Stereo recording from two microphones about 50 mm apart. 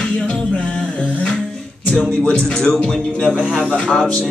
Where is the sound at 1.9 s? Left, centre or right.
Left.